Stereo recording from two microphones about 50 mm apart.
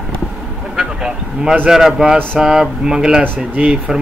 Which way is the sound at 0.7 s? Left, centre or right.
Centre.